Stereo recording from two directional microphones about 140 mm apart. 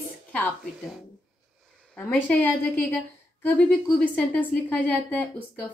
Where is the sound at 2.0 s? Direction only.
15° left (ahead or behind).